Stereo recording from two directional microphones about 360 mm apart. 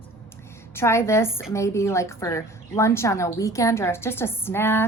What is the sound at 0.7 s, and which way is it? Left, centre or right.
A woman's voice, centre.